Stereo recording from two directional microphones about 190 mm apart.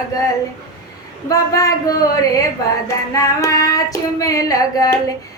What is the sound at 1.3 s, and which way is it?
Speech, 20° left (ahead or behind).